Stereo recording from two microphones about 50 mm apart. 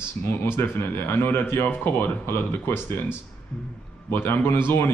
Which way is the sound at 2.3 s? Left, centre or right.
Left.